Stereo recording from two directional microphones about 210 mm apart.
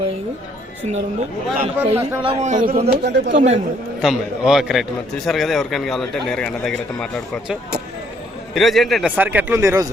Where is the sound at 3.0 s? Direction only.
55° right (ahead or behind).